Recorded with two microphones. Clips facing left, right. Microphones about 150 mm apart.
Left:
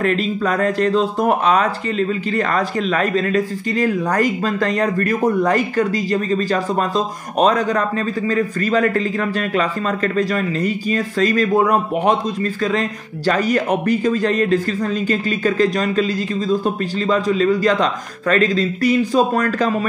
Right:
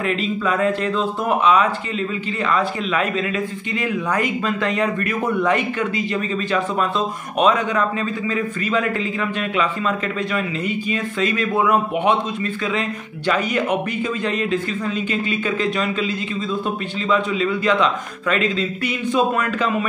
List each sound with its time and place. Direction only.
0.0 s speech: 40° left (ahead or behind)
13.3 s speech: 40° left (ahead or behind)